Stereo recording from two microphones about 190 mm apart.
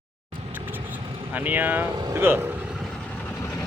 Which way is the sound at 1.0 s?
30° right (ahead or behind).